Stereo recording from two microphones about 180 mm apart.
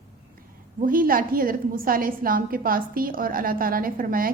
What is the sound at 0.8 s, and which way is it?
A woman's voice, 50° right (ahead or behind).